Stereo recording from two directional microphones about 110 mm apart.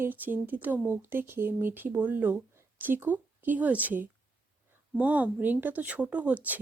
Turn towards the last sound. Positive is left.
turn(degrees=-15)  # may be behind; listen again after turning